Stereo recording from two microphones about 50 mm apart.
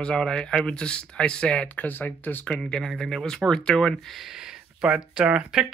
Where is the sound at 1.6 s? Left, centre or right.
Left.